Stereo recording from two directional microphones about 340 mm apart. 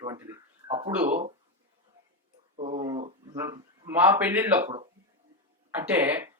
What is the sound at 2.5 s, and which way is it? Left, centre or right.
Speech, centre.